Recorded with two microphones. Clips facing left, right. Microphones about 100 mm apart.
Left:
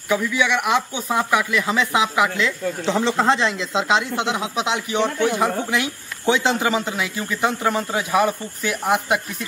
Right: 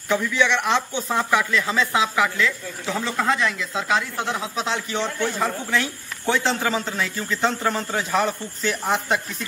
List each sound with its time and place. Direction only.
0.1 s speech: 10° left (ahead or behind)